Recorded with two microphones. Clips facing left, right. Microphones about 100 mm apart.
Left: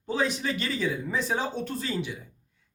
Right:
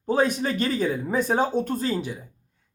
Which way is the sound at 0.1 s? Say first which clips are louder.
Right 5 dB; 50° right (ahead or behind).